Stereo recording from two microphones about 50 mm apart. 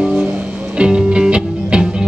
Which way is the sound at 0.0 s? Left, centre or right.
Centre.